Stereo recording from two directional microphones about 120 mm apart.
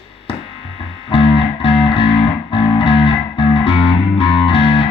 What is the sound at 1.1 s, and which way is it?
Music, 50° left (ahead or behind).